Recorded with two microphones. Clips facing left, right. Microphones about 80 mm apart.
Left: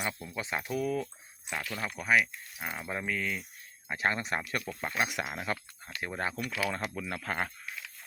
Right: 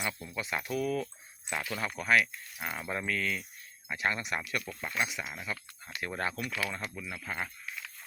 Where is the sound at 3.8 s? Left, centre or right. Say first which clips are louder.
Left 2 dB; left.